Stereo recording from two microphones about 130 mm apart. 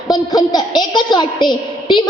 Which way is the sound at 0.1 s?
30° left (ahead or behind).